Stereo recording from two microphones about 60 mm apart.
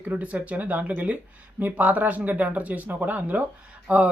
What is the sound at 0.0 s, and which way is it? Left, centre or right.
Speech, right.